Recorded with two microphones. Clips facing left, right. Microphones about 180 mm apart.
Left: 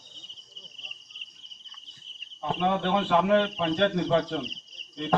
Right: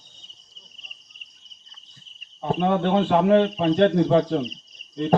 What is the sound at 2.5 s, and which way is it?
A man's voice, 35° right (ahead or behind).